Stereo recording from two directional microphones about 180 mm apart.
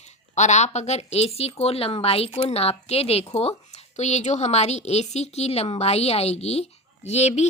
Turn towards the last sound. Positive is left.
turn(degrees=40)  # may be behind; listen again after turning